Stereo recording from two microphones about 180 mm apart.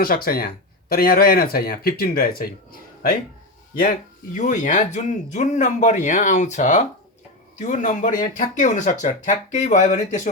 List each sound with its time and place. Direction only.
0.0 s speech: 55° left (ahead or behind)
4.4 s speech: 45° left (ahead or behind)